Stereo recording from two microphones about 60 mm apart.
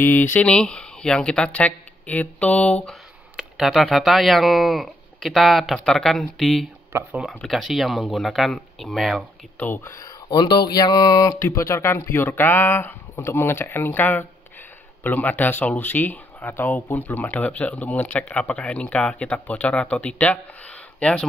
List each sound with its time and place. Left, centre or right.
0.0 s speech: left
0.5 s speech: centre
3.5 s speech: centre
6.9 s speech: right
7.2 s speech: centre
9.8 s speech: left
10.7 s a sound: left
11.5 s speech: left